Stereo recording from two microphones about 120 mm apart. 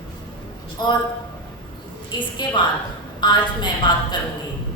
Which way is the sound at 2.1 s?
40° left (ahead or behind).